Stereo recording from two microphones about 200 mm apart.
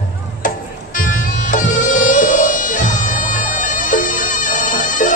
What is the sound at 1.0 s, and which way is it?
Music, 40° left (ahead or behind).